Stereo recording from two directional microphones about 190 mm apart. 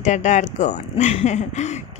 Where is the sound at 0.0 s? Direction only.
40° left (ahead or behind).